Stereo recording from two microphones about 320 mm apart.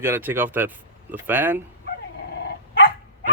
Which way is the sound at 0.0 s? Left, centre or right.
Centre.